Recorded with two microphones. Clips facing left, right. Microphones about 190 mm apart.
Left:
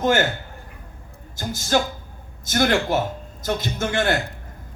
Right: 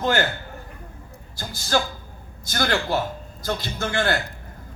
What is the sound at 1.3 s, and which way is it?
A man's voice, 20° left (ahead or behind).